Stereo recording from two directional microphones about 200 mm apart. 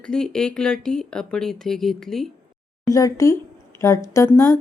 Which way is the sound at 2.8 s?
15° left (ahead or behind).